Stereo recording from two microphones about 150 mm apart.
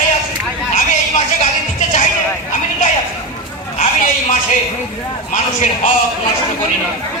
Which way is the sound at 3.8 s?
60° left (ahead or behind).